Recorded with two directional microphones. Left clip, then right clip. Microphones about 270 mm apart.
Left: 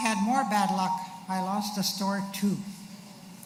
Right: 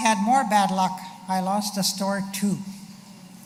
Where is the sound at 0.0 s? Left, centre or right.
Centre.